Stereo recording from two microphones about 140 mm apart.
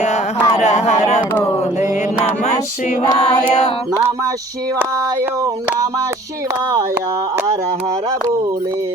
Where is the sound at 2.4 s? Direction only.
55° left (ahead or behind).